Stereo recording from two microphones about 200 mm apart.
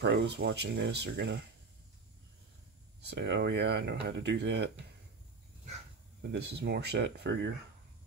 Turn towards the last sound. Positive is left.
turn(degrees=-55)  # may be behind; listen again after turning